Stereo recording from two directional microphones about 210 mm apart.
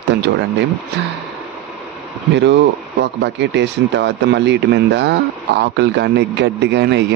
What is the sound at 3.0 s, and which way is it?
Speech, 55° right (ahead or behind).